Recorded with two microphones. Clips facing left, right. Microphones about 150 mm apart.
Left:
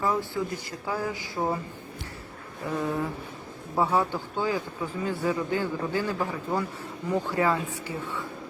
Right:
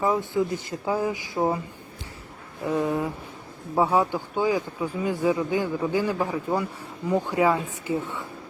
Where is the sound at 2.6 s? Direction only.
15° right (ahead or behind).